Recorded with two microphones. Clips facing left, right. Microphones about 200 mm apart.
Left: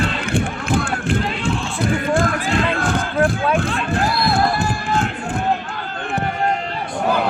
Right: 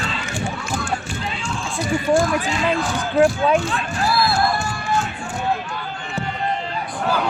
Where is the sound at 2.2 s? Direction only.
55° left (ahead or behind).